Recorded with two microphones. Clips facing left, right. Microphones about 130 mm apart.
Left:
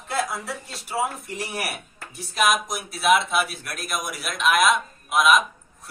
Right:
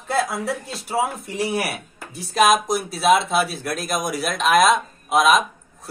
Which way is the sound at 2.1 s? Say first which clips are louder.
Right 5 dB; 35° right (ahead or behind).